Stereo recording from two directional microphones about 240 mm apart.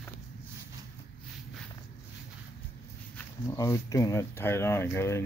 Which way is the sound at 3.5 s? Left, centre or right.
Centre.